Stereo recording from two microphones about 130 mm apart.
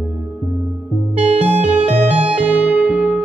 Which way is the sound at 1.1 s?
55° right (ahead or behind).